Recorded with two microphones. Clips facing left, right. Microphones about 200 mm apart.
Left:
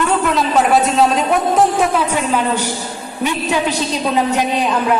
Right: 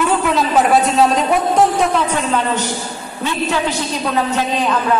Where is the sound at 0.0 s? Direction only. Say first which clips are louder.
Even; centre (ahead or behind).